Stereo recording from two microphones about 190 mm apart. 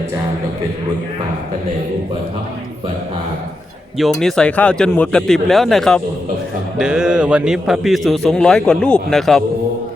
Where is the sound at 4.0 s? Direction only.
Centre (ahead or behind).